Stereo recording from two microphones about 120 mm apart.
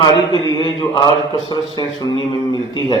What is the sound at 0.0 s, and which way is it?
A man's voice, 35° left (ahead or behind).